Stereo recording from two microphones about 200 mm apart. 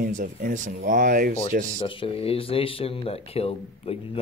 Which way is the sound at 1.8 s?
25° left (ahead or behind).